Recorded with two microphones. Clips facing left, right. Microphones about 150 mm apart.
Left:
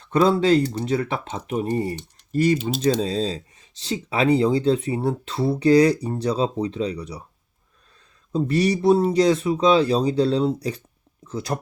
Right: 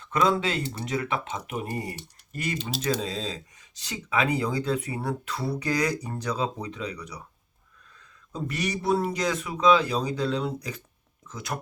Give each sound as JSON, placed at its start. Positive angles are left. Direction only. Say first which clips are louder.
{"t": 0.0, "sound": "speech", "louder": "left 6 dB", "side_deg": 35}